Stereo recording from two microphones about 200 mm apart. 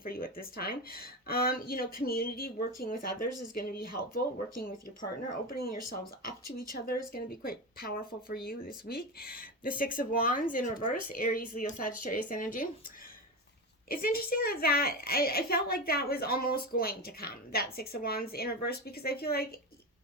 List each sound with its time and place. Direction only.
0.0 s a woman's voice: 45° left (ahead or behind)
13.8 s a woman's voice: 45° left (ahead or behind)